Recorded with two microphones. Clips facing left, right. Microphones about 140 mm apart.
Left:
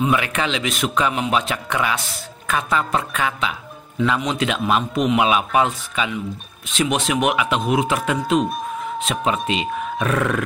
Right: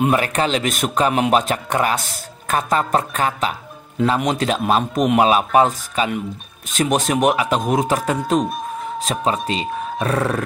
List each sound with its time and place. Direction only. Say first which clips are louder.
0.1 s a man's voice: right 3 dB; 40° right (ahead or behind)